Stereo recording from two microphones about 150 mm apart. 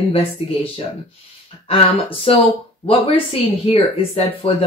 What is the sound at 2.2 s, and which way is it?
Speech, 40° left (ahead or behind).